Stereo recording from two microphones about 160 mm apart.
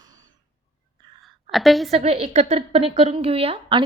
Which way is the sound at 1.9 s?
40° right (ahead or behind).